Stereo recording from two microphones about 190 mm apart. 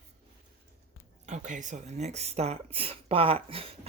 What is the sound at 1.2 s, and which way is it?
Speech, 40° right (ahead or behind).